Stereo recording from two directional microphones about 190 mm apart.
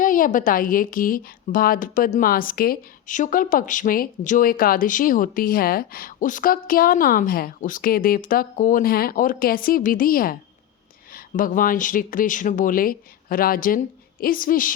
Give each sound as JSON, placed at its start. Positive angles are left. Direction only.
{"t": 0.0, "sound": "a woman's voice", "side_deg": 45}